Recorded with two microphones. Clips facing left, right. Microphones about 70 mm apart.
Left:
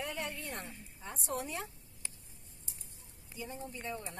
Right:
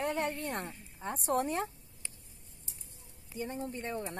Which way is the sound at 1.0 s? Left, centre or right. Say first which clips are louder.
Right 8 dB; right.